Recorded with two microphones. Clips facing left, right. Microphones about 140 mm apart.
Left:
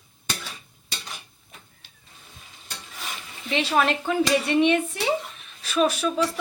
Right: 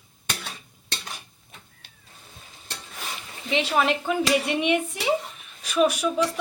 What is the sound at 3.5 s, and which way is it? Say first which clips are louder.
A woman's voice: even; 15° right (ahead or behind).